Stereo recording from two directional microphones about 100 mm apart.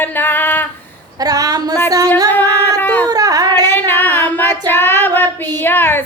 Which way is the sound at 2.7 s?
20° left (ahead or behind).